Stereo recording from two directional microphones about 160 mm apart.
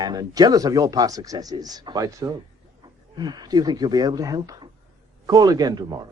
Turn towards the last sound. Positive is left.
turn(degrees=-25)  # may be behind; listen again after turning